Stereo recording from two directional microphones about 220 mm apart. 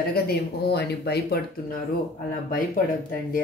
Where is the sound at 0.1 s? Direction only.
45° left (ahead or behind).